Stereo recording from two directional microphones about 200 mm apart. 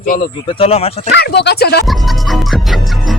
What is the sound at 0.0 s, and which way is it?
Speech, 45° left (ahead or behind).